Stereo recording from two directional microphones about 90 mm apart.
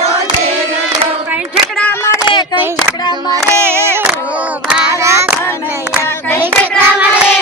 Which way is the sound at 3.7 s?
25° right (ahead or behind).